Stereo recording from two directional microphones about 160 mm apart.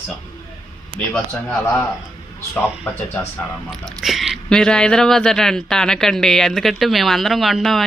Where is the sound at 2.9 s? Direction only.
10° left (ahead or behind).